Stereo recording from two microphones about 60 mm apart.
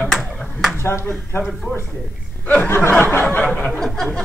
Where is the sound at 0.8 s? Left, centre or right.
Left.